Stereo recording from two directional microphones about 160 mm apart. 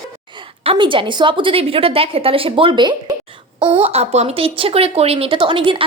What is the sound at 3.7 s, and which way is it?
A woman's voice, 40° right (ahead or behind).